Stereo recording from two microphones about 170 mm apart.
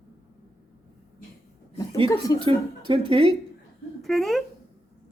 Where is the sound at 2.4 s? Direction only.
30° right (ahead or behind).